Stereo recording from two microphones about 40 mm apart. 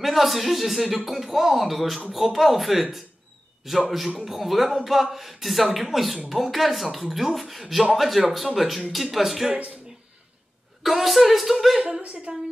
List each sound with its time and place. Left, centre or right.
0.0 s speech: centre
10.8 s speech: centre
12.3 s a woman's voice: right